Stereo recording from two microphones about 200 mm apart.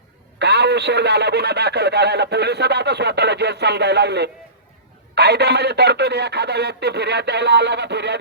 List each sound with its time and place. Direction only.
0.3 s speech: 55° right (ahead or behind)